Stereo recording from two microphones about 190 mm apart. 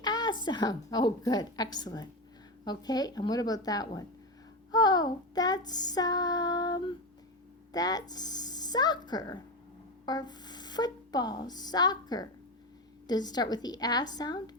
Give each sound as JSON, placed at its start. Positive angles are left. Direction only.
{"t": 0.0, "sound": "a woman's voice", "side_deg": 20}
{"t": 4.7, "sound": "child singing", "side_deg": 20}
{"t": 7.7, "sound": "a woman's voice", "side_deg": 20}